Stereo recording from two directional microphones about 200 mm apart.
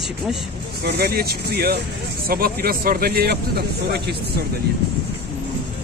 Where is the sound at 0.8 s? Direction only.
50° right (ahead or behind).